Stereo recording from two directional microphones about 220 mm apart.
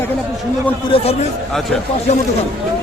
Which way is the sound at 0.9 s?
25° left (ahead or behind).